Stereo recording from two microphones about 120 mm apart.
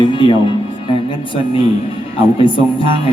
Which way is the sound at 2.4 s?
45° left (ahead or behind).